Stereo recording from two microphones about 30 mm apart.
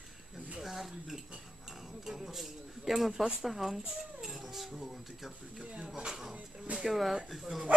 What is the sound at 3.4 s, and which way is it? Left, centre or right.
Dog, centre.